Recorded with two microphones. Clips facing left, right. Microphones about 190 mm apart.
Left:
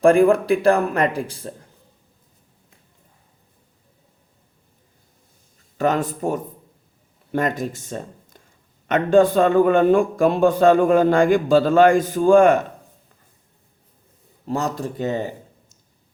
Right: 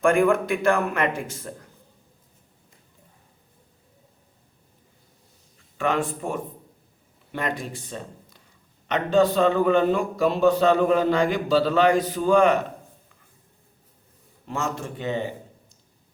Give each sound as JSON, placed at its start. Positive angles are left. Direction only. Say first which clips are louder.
{"t": 0.0, "sound": "a man's voice", "louder": "left 5 dB", "side_deg": 35}
{"t": 5.7, "sound": "a man's voice", "louder": "left 4 dB", "side_deg": 40}
{"t": 14.4, "sound": "a man's voice", "louder": "left 5 dB", "side_deg": 35}